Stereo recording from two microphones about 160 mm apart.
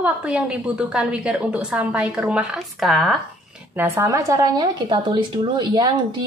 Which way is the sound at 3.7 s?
15° right (ahead or behind).